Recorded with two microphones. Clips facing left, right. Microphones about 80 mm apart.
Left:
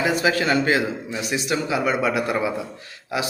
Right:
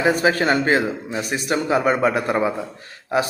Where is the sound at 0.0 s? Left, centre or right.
Right.